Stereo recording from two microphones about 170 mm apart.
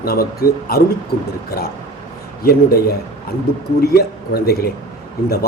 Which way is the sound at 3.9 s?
65° left (ahead or behind).